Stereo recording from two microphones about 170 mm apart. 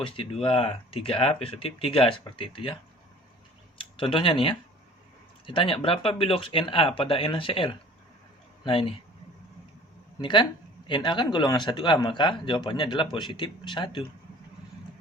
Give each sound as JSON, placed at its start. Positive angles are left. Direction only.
{"t": 0.0, "sound": "speech", "side_deg": 30}
{"t": 3.8, "sound": "speech", "side_deg": 30}
{"t": 10.2, "sound": "a man's voice", "side_deg": 25}